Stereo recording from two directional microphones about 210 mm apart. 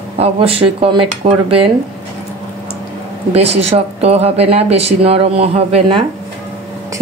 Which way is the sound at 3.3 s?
30° right (ahead or behind).